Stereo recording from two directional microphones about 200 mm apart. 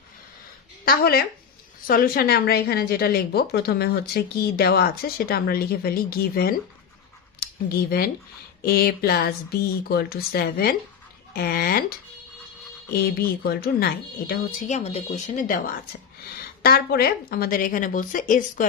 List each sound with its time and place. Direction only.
0.8 s a woman's voice: 50° left (ahead or behind)
12.9 s a woman's voice: 50° left (ahead or behind)
14.7 s a woman's voice: 30° left (ahead or behind)